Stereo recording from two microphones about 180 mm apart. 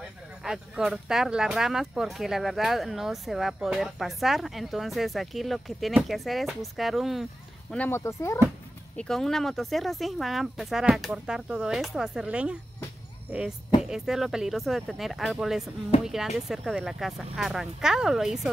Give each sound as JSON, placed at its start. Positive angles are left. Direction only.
{"t": 0.4, "sound": "speech", "side_deg": -5}
{"t": 7.7, "sound": "speech", "side_deg": 10}
{"t": 8.9, "sound": "speech", "side_deg": 5}